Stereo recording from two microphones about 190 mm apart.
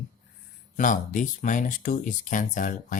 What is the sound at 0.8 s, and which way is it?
Speech, 40° left (ahead or behind).